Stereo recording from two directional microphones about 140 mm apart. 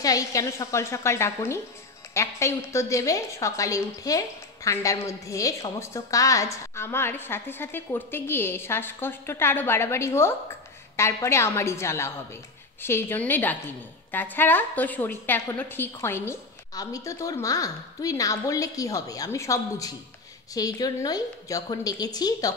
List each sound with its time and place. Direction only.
0.0 s a woman's voice: 25° left (ahead or behind)